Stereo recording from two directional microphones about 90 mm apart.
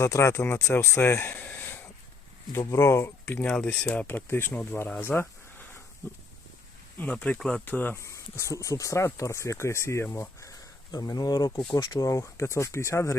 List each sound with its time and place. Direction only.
0.0 s speech: 35° left (ahead or behind)
2.5 s speech: 35° left (ahead or behind)
3.3 s speech: 15° left (ahead or behind)
7.0 s speech: 15° left (ahead or behind)
7.6 s speech: 20° left (ahead or behind)
7.9 s speech: 35° left (ahead or behind)